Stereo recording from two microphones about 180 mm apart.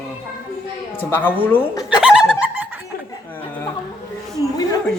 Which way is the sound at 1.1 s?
10° left (ahead or behind).